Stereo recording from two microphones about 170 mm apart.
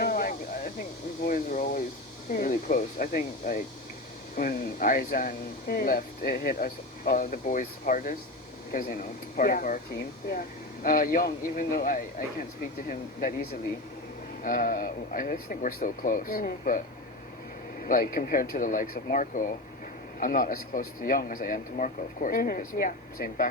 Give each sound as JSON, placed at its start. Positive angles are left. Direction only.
{"t": 0.0, "sound": "a sound", "side_deg": 55}
{"t": 2.3, "sound": "speech", "side_deg": 55}
{"t": 17.8, "sound": "speech", "side_deg": 55}